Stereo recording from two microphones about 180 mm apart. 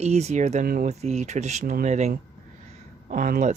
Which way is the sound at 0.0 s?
40° right (ahead or behind).